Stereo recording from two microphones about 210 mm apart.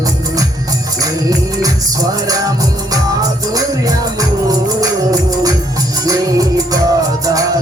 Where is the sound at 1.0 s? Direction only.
15° right (ahead or behind).